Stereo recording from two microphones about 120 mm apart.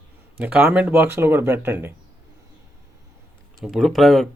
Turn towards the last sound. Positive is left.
turn(degrees=0)  # may be behind; listen again after turning